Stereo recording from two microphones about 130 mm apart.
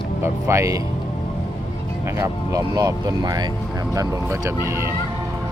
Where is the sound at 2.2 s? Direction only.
25° right (ahead or behind).